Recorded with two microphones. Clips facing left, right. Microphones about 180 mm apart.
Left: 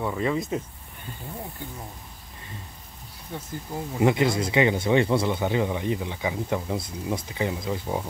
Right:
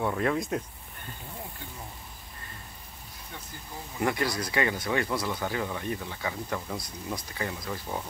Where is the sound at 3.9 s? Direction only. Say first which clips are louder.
Left 7 dB; 20° left (ahead or behind).